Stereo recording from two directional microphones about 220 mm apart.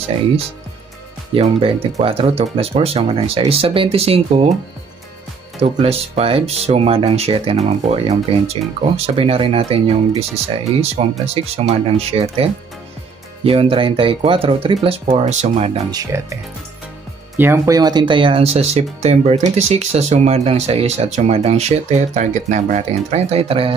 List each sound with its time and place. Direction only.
1.3 s speech: 25° right (ahead or behind)
5.6 s speech: 30° right (ahead or behind)
17.4 s speech: 15° right (ahead or behind)